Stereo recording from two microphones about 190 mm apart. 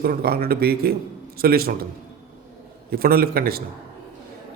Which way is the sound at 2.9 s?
50° right (ahead or behind).